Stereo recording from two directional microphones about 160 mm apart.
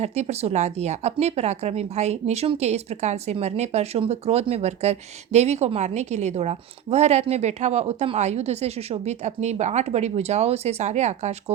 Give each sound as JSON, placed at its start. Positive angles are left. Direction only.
{"t": 0.0, "sound": "speech", "side_deg": -45}